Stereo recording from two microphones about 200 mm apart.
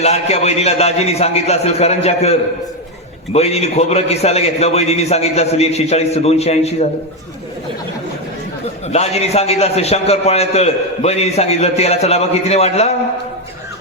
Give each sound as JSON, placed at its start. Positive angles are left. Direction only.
{"t": 0.0, "sound": "a man's voice", "side_deg": 30}
{"t": 8.9, "sound": "a man's voice", "side_deg": 30}